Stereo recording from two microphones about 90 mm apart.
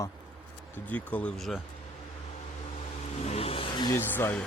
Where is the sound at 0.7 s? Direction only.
20° left (ahead or behind).